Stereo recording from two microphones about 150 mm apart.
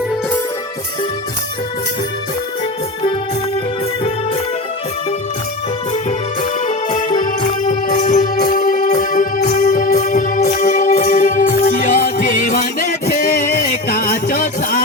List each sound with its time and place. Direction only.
7.2 s music: 60° left (ahead or behind)